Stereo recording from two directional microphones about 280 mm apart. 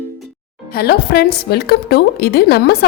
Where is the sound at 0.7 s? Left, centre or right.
Left.